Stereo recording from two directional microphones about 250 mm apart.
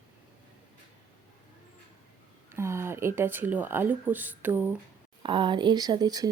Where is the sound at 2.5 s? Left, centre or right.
Centre.